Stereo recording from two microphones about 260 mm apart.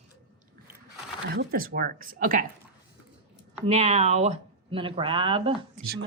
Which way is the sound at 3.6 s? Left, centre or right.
Right.